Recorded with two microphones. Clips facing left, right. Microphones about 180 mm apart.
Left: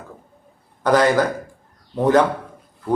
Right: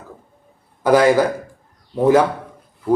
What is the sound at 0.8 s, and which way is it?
Speech, 10° right (ahead or behind).